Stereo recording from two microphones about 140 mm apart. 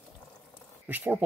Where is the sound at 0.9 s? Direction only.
15° right (ahead or behind).